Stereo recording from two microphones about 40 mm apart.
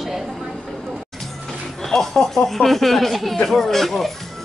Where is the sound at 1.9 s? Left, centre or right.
Centre.